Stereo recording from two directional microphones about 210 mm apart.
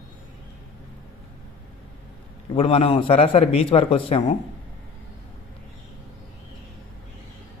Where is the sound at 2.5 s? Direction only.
25° left (ahead or behind).